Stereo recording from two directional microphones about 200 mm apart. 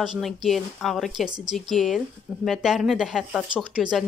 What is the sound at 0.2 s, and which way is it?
Speech, centre (ahead or behind).